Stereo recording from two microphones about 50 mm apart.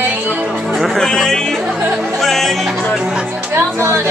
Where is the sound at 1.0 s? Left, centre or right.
Centre.